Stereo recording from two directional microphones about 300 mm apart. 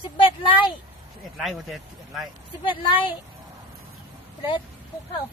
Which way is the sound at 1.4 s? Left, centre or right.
Centre.